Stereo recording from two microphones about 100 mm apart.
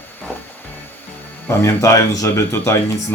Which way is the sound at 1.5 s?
25° left (ahead or behind).